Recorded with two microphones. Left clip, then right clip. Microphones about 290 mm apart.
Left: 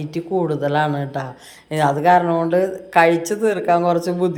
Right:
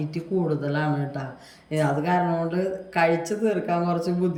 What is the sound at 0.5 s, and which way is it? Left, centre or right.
Speech, centre.